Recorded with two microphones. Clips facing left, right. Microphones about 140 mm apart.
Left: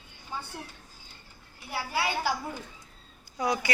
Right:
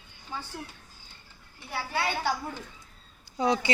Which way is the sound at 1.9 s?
5° left (ahead or behind).